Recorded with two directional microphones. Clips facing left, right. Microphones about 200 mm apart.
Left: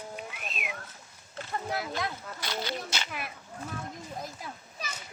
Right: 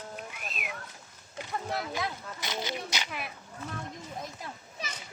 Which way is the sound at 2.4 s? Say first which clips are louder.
Left 1 dB; 20° right (ahead or behind).